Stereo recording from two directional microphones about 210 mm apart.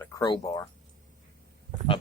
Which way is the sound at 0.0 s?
15° left (ahead or behind).